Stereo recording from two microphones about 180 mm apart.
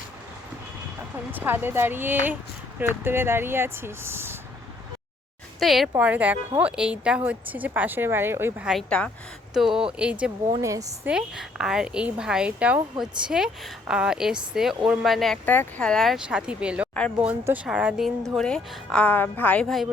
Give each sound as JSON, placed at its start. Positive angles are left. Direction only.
{"t": 1.3, "sound": "speech", "side_deg": -10}
{"t": 5.5, "sound": "speech", "side_deg": 0}
{"t": 10.6, "sound": "speech", "side_deg": -20}
{"t": 11.1, "sound": "speech", "side_deg": -5}